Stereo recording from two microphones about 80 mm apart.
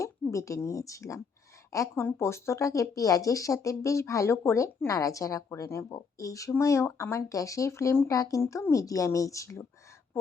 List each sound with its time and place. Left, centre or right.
0.0 s speech: left
2.0 s speech: left